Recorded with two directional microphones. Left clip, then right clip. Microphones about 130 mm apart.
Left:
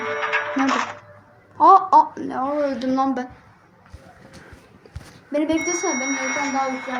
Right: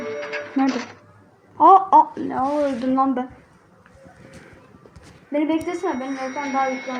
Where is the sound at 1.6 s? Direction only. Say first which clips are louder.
Even; 75° right (ahead or behind).